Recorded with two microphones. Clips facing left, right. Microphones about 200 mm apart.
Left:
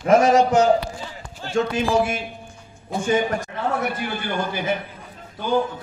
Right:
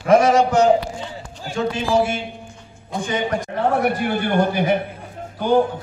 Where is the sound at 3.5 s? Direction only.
55° right (ahead or behind).